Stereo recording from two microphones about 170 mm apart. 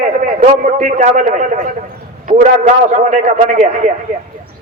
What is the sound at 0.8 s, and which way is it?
Speech, 45° right (ahead or behind).